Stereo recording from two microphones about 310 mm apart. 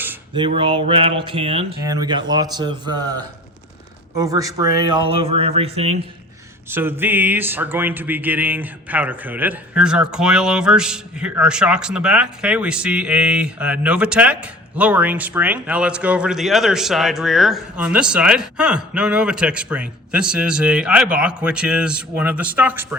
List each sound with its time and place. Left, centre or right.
0.0 s speech: centre
6.7 s speech: centre